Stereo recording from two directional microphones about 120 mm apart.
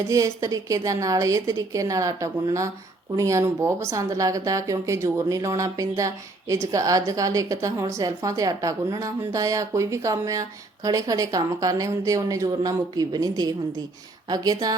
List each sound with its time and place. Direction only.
0.1 s a woman's voice: 25° right (ahead or behind)